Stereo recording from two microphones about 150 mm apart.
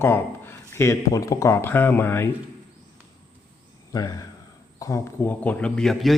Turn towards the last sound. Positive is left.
turn(degrees=0)  # may be behind; listen again after turning